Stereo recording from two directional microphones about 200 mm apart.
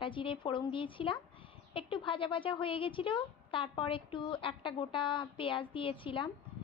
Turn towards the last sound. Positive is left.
turn(degrees=25)  # may be behind; listen again after turning